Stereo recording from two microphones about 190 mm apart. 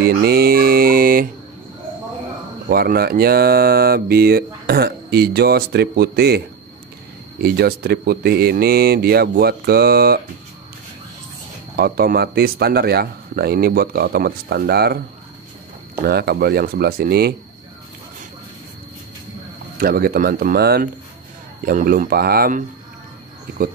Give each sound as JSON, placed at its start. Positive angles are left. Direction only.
{"t": 0.0, "sound": "mantra", "side_deg": -55}
{"t": 2.7, "sound": "speech", "side_deg": -55}
{"t": 7.4, "sound": "speech", "side_deg": -55}
{"t": 11.7, "sound": "speech", "side_deg": -50}
{"t": 16.1, "sound": "speech", "side_deg": -55}
{"t": 19.8, "sound": "speech", "side_deg": -50}